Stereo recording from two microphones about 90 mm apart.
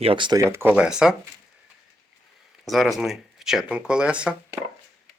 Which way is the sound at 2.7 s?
Centre (ahead or behind).